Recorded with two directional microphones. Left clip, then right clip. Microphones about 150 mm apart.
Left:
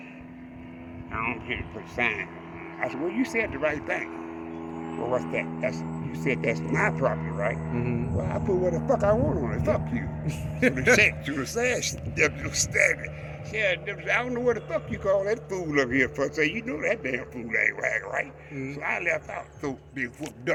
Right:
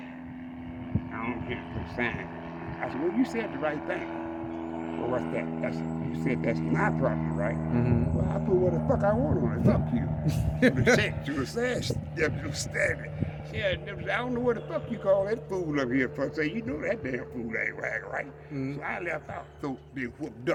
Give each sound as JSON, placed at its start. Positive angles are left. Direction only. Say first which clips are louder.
{"t": 1.1, "sound": "hum", "louder": "left 6 dB", "side_deg": -5}
{"t": 2.0, "sound": "a man's voice", "louder": "left 5 dB", "side_deg": -10}
{"t": 5.3, "sound": "speech", "louder": "left 3 dB", "side_deg": -10}
{"t": 7.7, "sound": "speech", "louder": "right 2 dB", "side_deg": -65}
{"t": 8.3, "sound": "a man's voice", "louder": "left 1 dB", "side_deg": -15}
{"t": 10.2, "sound": "speech", "louder": "right 2 dB", "side_deg": -55}
{"t": 10.9, "sound": "a man's voice", "louder": "left 5 dB", "side_deg": -5}